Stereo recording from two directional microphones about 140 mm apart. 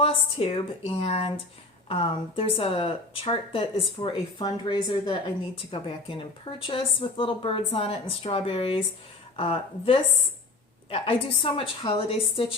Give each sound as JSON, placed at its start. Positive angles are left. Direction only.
{"t": 0.0, "sound": "a woman's voice", "side_deg": 40}